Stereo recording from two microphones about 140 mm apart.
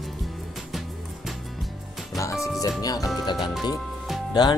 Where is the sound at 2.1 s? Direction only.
20° left (ahead or behind).